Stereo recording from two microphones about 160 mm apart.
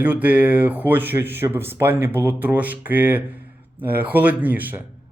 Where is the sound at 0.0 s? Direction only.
10° right (ahead or behind).